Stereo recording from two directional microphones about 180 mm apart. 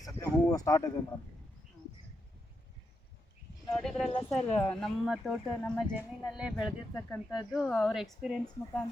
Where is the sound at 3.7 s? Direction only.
5° left (ahead or behind).